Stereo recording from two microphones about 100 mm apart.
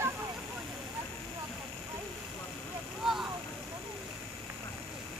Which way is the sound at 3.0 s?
5° right (ahead or behind).